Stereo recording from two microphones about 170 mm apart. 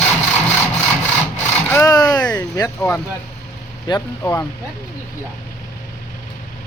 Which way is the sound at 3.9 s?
25° left (ahead or behind).